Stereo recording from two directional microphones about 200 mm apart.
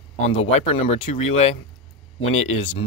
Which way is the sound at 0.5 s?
30° left (ahead or behind).